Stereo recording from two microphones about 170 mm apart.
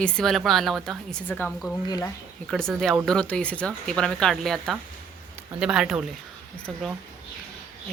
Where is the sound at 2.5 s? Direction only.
5° left (ahead or behind).